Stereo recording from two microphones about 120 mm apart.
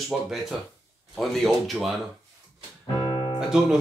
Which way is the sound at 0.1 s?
10° right (ahead or behind).